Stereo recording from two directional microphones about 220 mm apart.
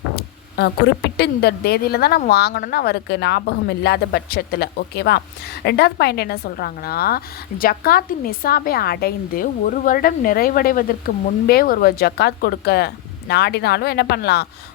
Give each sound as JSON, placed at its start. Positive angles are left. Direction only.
{"t": 1.1, "sound": "a woman's voice", "side_deg": 50}